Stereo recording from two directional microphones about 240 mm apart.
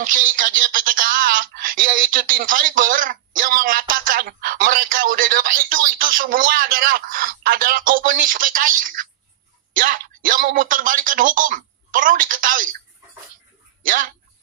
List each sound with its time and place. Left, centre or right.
0.0 s speech: right
13.8 s speech: right